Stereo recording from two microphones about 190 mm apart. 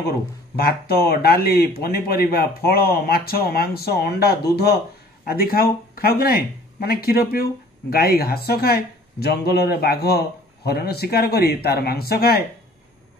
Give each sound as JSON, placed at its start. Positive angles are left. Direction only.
{"t": 0.6, "sound": "speech", "side_deg": 55}